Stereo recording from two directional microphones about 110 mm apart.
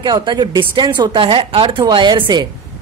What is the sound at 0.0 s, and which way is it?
A woman's voice, 45° right (ahead or behind).